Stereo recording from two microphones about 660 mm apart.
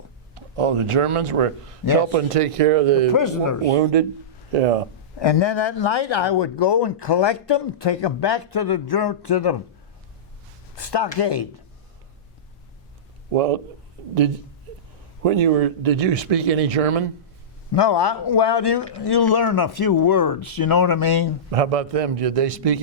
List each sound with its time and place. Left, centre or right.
0.3 s speech: right
3.2 s speech: left
3.8 s speech: right
4.5 s speech: right
5.2 s speech: left
10.8 s speech: left
13.3 s speech: right
15.2 s speech: right
17.7 s speech: left
21.5 s speech: right